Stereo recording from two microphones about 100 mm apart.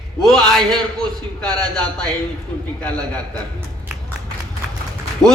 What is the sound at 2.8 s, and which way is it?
Speech, 10° left (ahead or behind).